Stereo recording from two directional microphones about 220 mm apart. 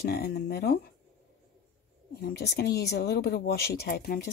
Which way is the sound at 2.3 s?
45° left (ahead or behind).